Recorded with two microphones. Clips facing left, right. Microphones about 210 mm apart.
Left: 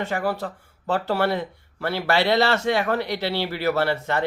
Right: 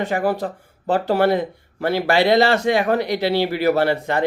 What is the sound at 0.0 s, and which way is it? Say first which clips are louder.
Speech: right 5 dB; 15° right (ahead or behind).